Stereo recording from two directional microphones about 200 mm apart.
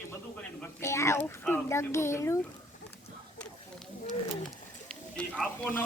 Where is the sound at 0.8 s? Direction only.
15° left (ahead or behind).